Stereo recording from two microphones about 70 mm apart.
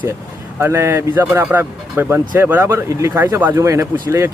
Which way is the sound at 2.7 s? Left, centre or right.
Right.